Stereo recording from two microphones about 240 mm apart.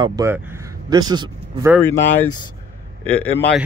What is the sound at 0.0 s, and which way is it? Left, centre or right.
Speech, centre.